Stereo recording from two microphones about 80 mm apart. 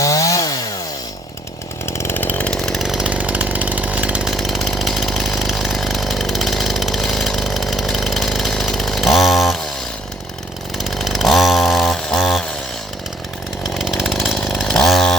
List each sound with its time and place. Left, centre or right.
0.0 s chainsaw: left
1.9 s chainsaw: left
2.5 s chainsaw: centre
3.1 s chainsaw: centre
4.3 s chainsaw: centre
10.8 s chainsaw: centre
13.7 s chainsaw: centre